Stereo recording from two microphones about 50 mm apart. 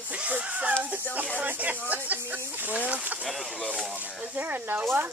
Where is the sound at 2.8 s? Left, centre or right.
Right.